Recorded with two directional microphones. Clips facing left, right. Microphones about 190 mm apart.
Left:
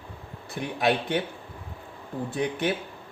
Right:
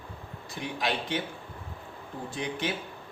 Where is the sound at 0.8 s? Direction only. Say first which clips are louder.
Left 6 dB; 55° left (ahead or behind).